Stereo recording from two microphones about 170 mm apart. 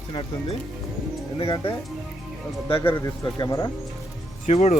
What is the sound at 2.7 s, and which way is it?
Speech, 10° left (ahead or behind).